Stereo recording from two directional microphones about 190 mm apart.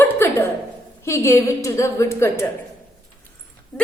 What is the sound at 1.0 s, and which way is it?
A woman's voice, 15° left (ahead or behind).